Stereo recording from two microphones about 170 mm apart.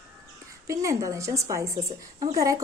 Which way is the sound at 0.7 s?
20° right (ahead or behind).